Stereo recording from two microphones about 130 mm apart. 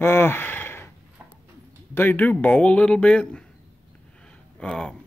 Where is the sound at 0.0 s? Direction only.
20° left (ahead or behind).